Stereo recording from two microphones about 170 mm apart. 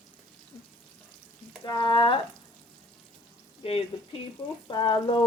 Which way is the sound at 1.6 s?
25° left (ahead or behind).